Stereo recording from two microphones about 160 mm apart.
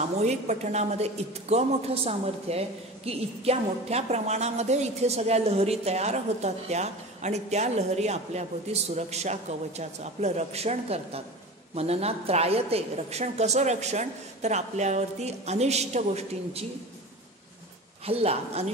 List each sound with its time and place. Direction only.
0.2 s a woman's voice: 45° right (ahead or behind)
18.0 s a woman's voice: 40° right (ahead or behind)